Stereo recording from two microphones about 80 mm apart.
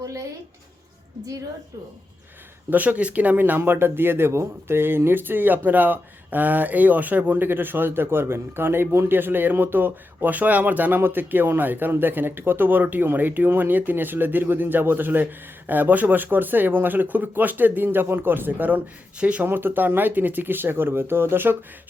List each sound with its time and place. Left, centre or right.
0.0 s a sound: right
2.6 s speech: right
19.5 s speech: right